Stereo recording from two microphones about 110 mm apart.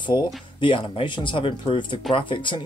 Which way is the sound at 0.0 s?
50° left (ahead or behind).